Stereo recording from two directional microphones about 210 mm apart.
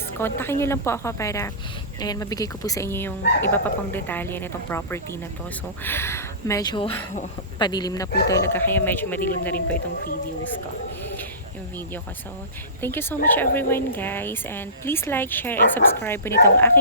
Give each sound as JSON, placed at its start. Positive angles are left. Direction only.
{"t": 0.2, "sound": "speech", "side_deg": 10}
{"t": 12.8, "sound": "speech", "side_deg": 10}